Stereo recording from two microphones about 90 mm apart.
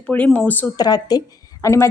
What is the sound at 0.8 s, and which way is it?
Speech, 45° left (ahead or behind).